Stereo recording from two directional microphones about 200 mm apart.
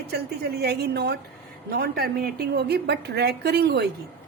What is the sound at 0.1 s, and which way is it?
A woman's voice, 55° right (ahead or behind).